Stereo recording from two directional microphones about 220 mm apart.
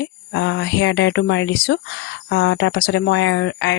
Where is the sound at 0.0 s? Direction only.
55° left (ahead or behind).